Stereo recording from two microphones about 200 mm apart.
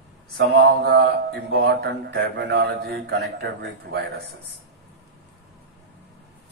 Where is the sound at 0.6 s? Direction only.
55° right (ahead or behind).